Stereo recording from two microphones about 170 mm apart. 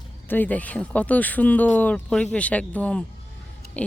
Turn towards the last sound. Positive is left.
turn(degrees=10)  # may be behind; listen again after turning